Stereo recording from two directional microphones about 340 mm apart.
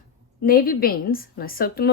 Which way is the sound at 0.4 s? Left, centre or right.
Left.